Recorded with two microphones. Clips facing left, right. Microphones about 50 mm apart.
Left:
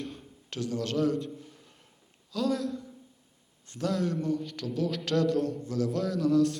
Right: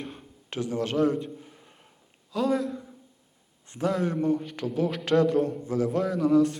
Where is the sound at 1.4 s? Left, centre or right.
Right.